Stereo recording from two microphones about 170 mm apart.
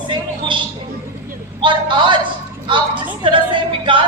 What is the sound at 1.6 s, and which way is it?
Speech, 30° right (ahead or behind).